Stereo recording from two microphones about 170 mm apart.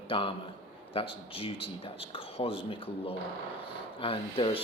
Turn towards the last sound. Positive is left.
turn(degrees=30)  # may be behind; listen again after turning